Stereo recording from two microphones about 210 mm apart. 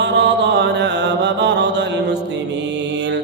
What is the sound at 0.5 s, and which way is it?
Mantra, 55° right (ahead or behind).